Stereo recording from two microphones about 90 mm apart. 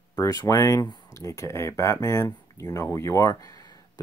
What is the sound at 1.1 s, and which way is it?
Speech, 35° left (ahead or behind).